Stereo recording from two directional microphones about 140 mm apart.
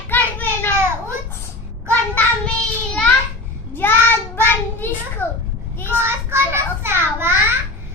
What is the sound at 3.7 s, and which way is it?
A child's voice, 15° left (ahead or behind).